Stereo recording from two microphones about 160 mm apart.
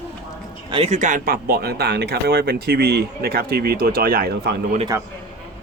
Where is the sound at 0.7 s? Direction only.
40° right (ahead or behind); by 4.6 s 75° right (ahead or behind).